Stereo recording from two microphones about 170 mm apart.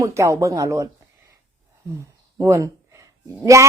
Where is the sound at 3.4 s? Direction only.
20° right (ahead or behind).